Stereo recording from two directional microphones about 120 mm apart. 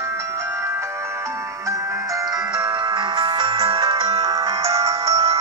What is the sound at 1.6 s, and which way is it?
Music, 30° right (ahead or behind).